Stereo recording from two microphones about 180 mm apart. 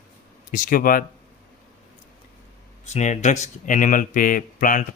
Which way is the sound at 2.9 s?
40° left (ahead or behind).